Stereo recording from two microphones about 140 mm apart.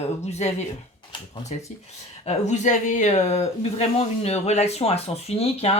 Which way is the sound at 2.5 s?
60° left (ahead or behind).